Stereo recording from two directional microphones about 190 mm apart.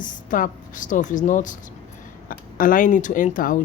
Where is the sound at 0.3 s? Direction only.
45° left (ahead or behind).